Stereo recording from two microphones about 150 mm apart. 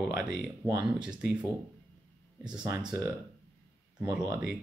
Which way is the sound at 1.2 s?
5° right (ahead or behind).